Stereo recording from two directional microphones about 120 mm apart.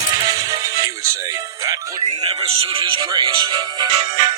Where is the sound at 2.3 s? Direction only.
50° right (ahead or behind).